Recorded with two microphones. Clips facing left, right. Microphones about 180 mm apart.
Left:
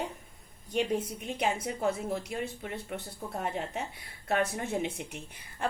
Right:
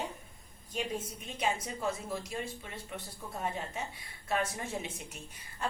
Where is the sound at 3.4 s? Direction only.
65° left (ahead or behind).